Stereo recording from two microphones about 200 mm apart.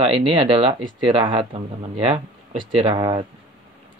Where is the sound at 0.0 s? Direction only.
25° right (ahead or behind).